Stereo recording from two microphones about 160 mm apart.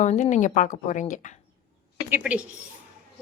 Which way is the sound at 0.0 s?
50° left (ahead or behind).